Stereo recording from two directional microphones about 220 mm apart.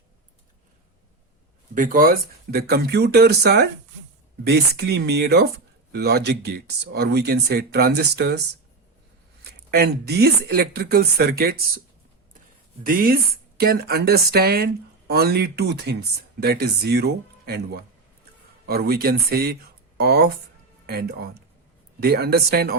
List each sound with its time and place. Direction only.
1.7 s speech: 40° right (ahead or behind)
9.4 s speech: 45° right (ahead or behind)
12.8 s speech: 40° right (ahead or behind)